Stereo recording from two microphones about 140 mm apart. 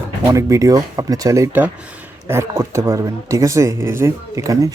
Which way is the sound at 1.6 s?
10° right (ahead or behind).